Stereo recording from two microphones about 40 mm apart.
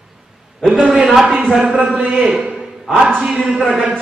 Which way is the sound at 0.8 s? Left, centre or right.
Centre.